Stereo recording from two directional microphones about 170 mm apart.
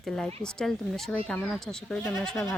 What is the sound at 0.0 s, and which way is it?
Speech, 5° left (ahead or behind).